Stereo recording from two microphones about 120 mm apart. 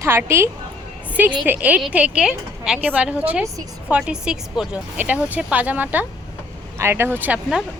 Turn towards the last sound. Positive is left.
turn(degrees=-15)  # may be behind; listen again after turning